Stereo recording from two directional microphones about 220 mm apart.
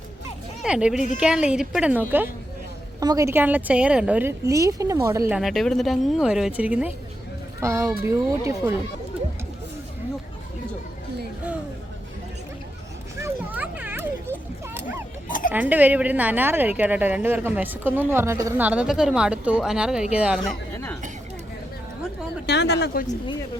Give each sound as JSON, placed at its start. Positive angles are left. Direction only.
{"t": 0.6, "sound": "a woman's voice", "side_deg": -5}
{"t": 5.3, "sound": "a woman's voice", "side_deg": 0}
{"t": 13.1, "sound": "a sound", "side_deg": -10}
{"t": 15.3, "sound": "music", "side_deg": 40}
{"t": 15.7, "sound": "a woman's voice", "side_deg": -5}
{"t": 22.4, "sound": "speech", "side_deg": 50}